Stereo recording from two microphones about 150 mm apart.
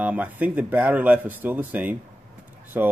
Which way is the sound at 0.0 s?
10° right (ahead or behind).